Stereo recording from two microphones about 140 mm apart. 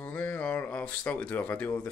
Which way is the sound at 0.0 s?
10° left (ahead or behind).